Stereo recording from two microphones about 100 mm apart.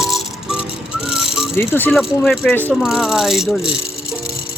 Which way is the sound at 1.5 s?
20° left (ahead or behind).